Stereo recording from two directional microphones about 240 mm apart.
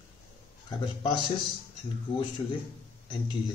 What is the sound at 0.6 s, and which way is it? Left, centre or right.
Speech, centre.